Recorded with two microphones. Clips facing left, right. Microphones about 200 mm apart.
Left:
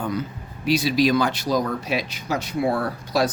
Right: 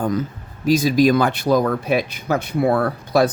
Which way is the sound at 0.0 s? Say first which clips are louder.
Right 5 dB; 45° right (ahead or behind).